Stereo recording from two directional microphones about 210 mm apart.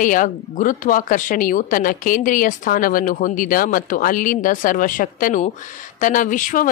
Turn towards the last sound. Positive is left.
turn(degrees=40)  # may be behind; listen again after turning